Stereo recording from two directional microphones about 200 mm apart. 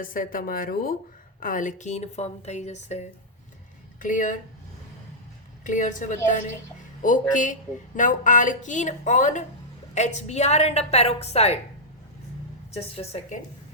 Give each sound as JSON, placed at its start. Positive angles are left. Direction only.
{"t": 0.0, "sound": "speech", "side_deg": 45}
{"t": 4.0, "sound": "speech", "side_deg": 40}
{"t": 5.6, "sound": "speech", "side_deg": 40}
{"t": 12.7, "sound": "speech", "side_deg": 30}